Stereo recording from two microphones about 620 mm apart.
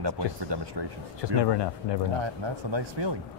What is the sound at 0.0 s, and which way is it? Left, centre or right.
Speech, right.